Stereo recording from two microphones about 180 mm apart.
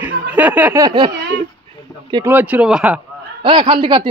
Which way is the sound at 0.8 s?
25° right (ahead or behind).